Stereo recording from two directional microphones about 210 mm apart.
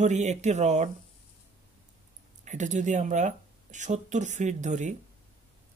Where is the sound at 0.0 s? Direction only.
35° right (ahead or behind).